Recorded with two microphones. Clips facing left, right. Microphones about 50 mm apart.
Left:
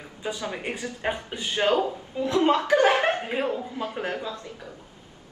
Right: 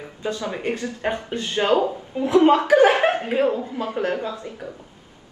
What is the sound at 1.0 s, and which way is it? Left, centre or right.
Speech, centre.